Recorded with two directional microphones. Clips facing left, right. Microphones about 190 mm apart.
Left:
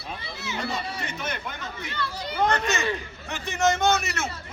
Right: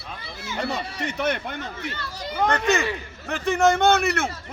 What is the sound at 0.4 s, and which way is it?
Speech, 55° right (ahead or behind).